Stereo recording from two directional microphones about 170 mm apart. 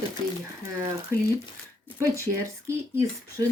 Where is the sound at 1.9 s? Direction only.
15° right (ahead or behind).